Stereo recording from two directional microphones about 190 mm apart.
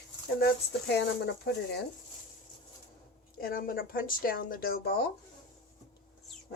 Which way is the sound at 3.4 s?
50° left (ahead or behind).